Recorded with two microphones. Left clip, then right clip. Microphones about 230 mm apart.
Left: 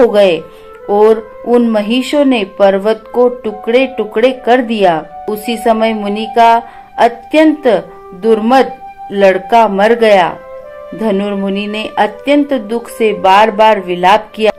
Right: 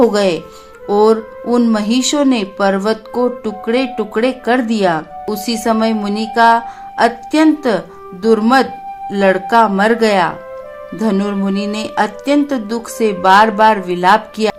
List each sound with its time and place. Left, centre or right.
0.9 s speech: right
3.1 s speech: right
3.4 s speech: right